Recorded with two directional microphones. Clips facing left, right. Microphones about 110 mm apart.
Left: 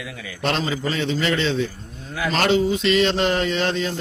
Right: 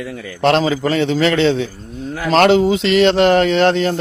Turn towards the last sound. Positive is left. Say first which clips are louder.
# right 9 dB
turn(degrees=-65)  # may be behind; listen again after turning